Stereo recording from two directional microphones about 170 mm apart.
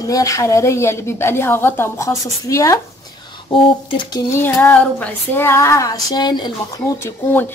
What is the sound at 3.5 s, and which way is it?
Speech, 30° left (ahead or behind).